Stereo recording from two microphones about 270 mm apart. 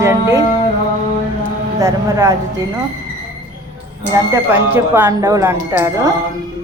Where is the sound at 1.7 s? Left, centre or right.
Centre.